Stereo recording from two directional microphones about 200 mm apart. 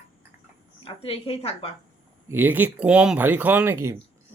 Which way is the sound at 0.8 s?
30° left (ahead or behind).